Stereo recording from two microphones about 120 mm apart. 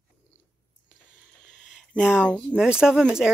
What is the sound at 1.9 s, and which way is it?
Speech, 10° right (ahead or behind).